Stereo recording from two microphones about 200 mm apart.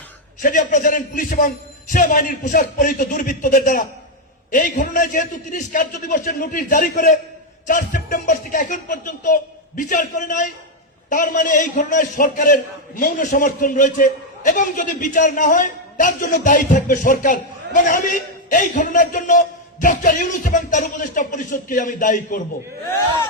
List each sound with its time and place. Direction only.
0.4 s a man's voice: 40° left (ahead or behind)